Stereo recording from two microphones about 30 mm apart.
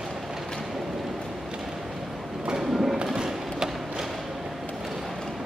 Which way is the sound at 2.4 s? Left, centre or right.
Right.